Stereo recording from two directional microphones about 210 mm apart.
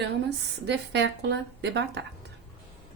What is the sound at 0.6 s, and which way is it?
Speech, 55° right (ahead or behind).